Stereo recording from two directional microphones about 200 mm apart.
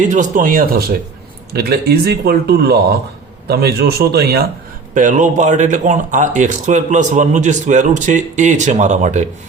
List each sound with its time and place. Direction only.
0.0 s speech: 40° right (ahead or behind)
4.9 s speech: 40° right (ahead or behind)